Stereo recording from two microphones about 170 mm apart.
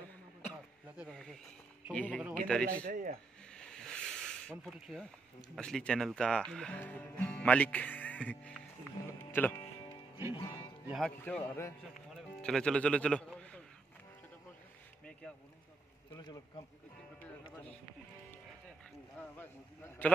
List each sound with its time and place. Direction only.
0.9 s speech: 5° left (ahead or behind)
2.7 s speech: 55° right (ahead or behind)
3.5 s snake: 5° left (ahead or behind)
5.6 s speech: 5° left (ahead or behind)
9.3 s music: 15° left (ahead or behind)
11.0 s a man's voice: 5° left (ahead or behind)
19.1 s speech: 10° left (ahead or behind)